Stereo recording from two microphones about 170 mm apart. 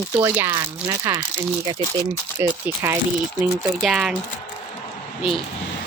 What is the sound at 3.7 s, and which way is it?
Speech, centre (ahead or behind).